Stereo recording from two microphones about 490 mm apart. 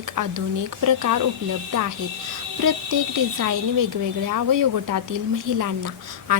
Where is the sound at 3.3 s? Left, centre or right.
Right.